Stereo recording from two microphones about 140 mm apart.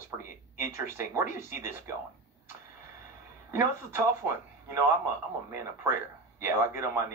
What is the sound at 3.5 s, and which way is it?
Speech, 20° right (ahead or behind).